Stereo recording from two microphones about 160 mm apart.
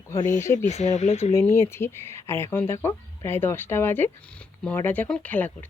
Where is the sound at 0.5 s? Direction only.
45° left (ahead or behind).